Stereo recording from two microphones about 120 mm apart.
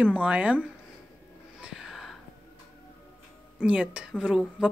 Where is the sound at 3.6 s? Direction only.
10° right (ahead or behind).